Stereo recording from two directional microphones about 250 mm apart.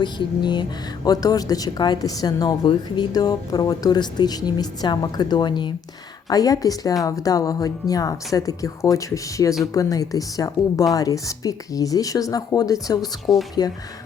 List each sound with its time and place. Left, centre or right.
0.0 s a woman's voice: centre